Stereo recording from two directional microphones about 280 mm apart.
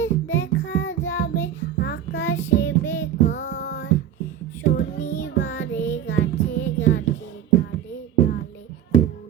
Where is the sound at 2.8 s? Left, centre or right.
Centre.